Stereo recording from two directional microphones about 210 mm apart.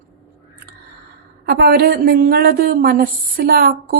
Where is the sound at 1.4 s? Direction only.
45° right (ahead or behind).